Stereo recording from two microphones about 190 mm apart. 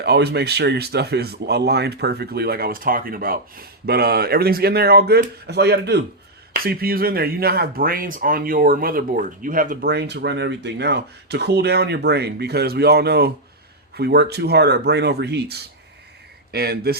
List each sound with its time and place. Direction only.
0.0 s speech: 60° right (ahead or behind)